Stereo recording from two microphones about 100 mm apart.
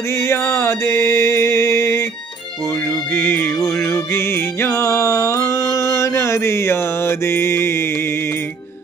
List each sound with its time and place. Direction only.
0.1 s mantra: 25° left (ahead or behind)
2.9 s music: 20° left (ahead or behind)